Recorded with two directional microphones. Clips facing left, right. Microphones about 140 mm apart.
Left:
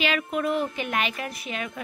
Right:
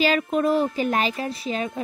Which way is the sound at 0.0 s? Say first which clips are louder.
Right 5 dB; 35° right (ahead or behind).